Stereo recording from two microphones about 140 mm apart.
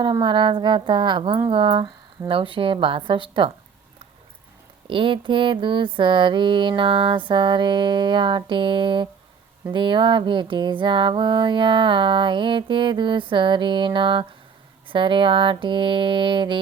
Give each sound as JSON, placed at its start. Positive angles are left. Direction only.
{"t": 0.0, "sound": "music", "side_deg": -35}
{"t": 4.9, "sound": "music", "side_deg": -35}